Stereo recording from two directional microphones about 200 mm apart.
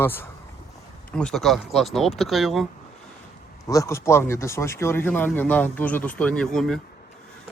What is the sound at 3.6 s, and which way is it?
Speech, 15° left (ahead or behind).